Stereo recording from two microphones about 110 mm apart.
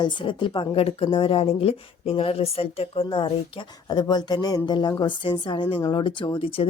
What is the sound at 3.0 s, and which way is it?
Speech, 50° left (ahead or behind).